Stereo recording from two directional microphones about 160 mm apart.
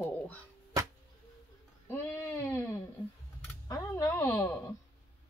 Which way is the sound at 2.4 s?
15° left (ahead or behind).